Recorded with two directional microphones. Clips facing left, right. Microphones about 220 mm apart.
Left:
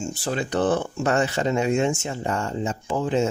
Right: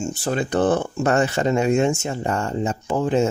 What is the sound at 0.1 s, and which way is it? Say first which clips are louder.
Speech: right 3 dB; 50° right (ahead or behind).